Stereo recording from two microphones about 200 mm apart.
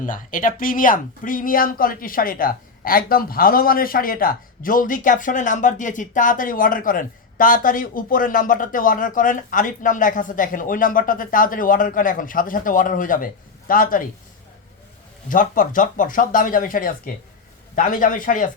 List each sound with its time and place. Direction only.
0.0 s speech: 40° left (ahead or behind)
15.3 s a man's voice: 40° left (ahead or behind)